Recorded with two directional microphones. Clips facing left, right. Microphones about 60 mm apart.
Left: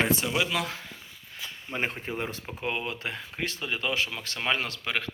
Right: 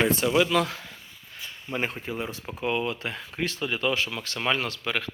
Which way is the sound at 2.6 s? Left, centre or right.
Left.